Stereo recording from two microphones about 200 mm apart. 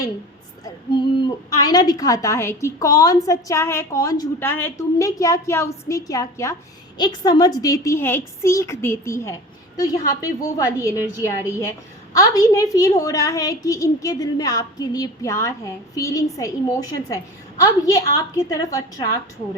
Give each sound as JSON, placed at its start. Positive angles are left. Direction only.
{"t": 0.6, "sound": "a woman's voice", "side_deg": 20}